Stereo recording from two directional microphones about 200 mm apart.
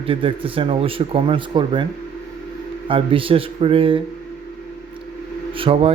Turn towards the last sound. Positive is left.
turn(degrees=-30)  # may be behind; listen again after turning